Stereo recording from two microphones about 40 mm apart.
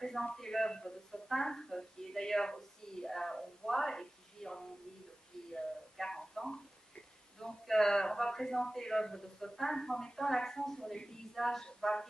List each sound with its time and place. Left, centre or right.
0.0 s speech: centre
3.1 s a sound: centre
7.3 s speech: centre